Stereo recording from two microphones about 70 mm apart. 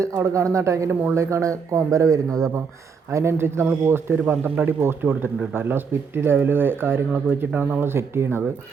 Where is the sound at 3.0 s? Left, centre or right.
Right.